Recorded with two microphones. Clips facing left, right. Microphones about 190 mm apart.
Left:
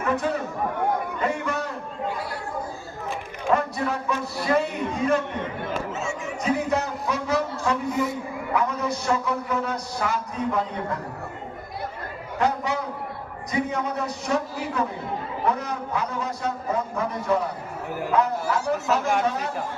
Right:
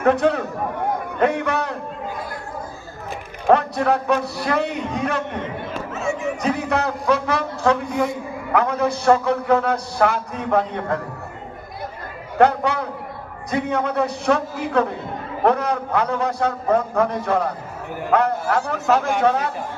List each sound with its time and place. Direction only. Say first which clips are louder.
0.0 s a man's voice: right 7 dB; 65° right (ahead or behind)
3.4 s a man's voice: right 6 dB; 70° right (ahead or behind)
5.9 s a sound: right 6 dB; 60° right (ahead or behind)
8.5 s a man's voice: right 6 dB; 65° right (ahead or behind)
12.4 s a man's voice: right 7 dB; 65° right (ahead or behind)